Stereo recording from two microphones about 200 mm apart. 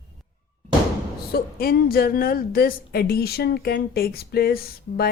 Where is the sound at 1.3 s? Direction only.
50° left (ahead or behind).